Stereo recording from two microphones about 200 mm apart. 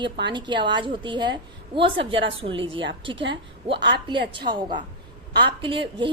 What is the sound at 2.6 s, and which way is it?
Speech, 70° right (ahead or behind).